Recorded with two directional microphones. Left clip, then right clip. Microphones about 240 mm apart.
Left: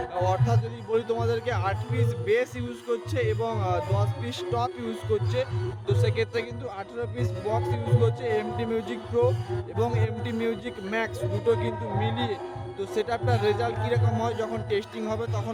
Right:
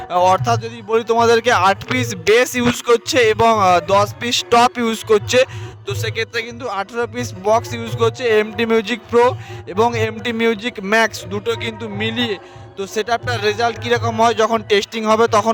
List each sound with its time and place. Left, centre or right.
0.1 s a man's voice: right